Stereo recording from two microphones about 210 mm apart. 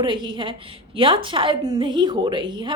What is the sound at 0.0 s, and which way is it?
A woman's voice, 20° right (ahead or behind).